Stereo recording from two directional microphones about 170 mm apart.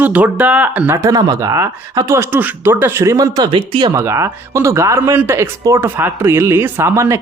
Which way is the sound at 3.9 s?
15° right (ahead or behind).